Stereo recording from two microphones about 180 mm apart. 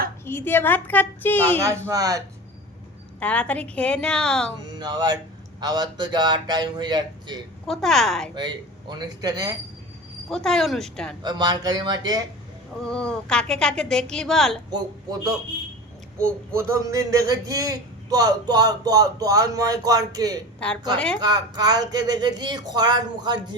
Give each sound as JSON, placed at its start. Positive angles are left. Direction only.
{"t": 0.3, "sound": "a woman's voice", "side_deg": 10}
{"t": 1.9, "sound": "a man's voice", "side_deg": -20}
{"t": 3.2, "sound": "a woman's voice", "side_deg": 5}
{"t": 4.7, "sound": "a man's voice", "side_deg": -25}
{"t": 7.7, "sound": "a woman's voice", "side_deg": 0}
{"t": 8.4, "sound": "a man's voice", "side_deg": -25}
{"t": 10.2, "sound": "a woman's voice", "side_deg": 5}
{"t": 11.2, "sound": "a man's voice", "side_deg": -25}
{"t": 12.8, "sound": "a woman's voice", "side_deg": 5}
{"t": 16.6, "sound": "a man's voice", "side_deg": -15}
{"t": 20.6, "sound": "a woman's voice", "side_deg": 5}
{"t": 21.2, "sound": "a man's voice", "side_deg": -20}